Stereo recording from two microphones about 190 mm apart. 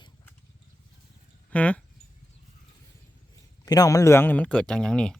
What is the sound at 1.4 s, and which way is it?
Speech, 5° left (ahead or behind).